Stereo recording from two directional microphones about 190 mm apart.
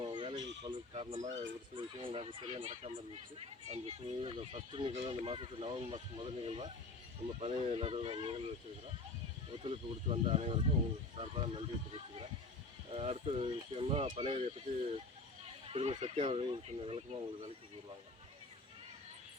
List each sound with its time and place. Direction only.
0.0 s a sound: 25° right (ahead or behind)
1.7 s speech: 30° right (ahead or behind)
9.6 s speech: 30° right (ahead or behind)
15.6 s speech: 30° right (ahead or behind)